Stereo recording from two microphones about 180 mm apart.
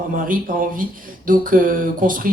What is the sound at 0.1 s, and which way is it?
Speech, 50° right (ahead or behind).